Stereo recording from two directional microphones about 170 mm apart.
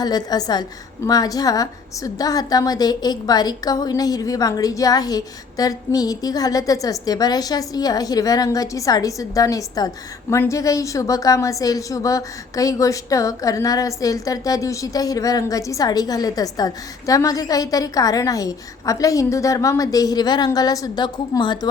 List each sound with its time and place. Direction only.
0.0 s a woman's voice: 25° left (ahead or behind)